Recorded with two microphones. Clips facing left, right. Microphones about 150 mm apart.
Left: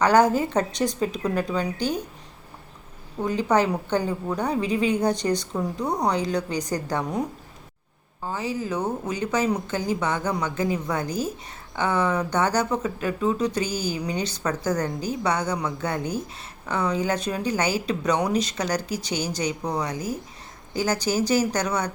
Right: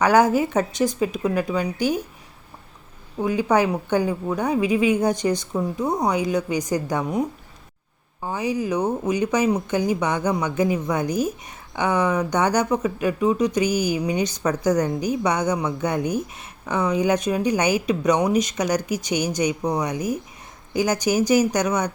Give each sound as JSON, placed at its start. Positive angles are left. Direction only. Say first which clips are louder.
{"t": 0.0, "sound": "speech", "louder": "right 1 dB", "side_deg": -10}
{"t": 3.2, "sound": "speech", "louder": "right 2 dB", "side_deg": -10}